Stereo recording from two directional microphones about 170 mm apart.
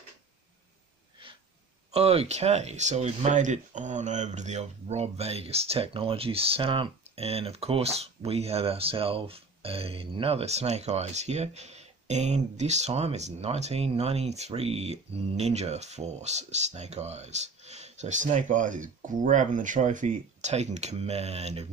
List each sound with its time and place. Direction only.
1.9 s speech: 35° right (ahead or behind)